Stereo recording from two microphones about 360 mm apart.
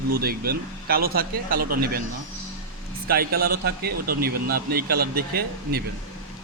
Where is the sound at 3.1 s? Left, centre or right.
Right.